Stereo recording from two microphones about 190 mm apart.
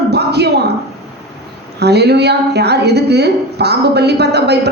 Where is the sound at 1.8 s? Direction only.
60° right (ahead or behind).